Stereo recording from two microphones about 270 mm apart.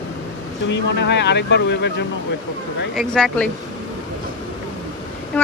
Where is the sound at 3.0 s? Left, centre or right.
Centre.